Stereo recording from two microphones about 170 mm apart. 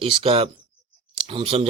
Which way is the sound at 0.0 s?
35° right (ahead or behind).